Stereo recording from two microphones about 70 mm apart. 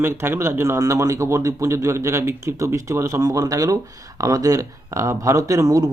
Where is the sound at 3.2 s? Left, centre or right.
Right.